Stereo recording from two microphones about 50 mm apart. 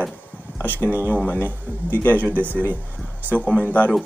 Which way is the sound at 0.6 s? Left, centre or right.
Left.